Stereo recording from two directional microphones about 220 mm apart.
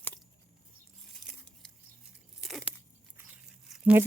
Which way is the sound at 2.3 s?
Centre (ahead or behind).